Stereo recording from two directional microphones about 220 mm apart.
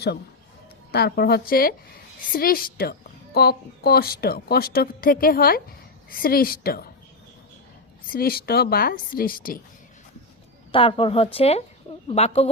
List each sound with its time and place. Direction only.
0.9 s a woman's voice: 45° left (ahead or behind)
8.1 s a woman's voice: 45° left (ahead or behind)
10.7 s a woman's voice: 25° left (ahead or behind)